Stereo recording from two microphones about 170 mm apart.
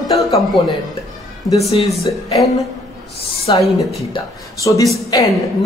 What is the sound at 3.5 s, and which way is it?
Speech, 30° left (ahead or behind).